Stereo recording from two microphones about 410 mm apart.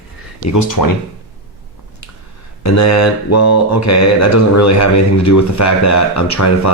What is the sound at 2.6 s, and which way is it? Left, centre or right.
Speech, left.